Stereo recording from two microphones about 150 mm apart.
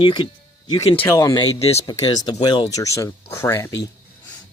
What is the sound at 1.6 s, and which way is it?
Speech, 40° left (ahead or behind).